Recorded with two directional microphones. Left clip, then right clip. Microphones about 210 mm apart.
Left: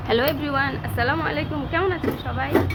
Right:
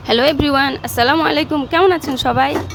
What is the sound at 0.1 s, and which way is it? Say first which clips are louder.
A woman's voice: right 8 dB; 45° right (ahead or behind).